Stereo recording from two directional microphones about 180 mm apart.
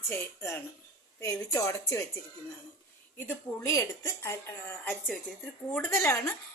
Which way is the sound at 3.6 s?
15° left (ahead or behind).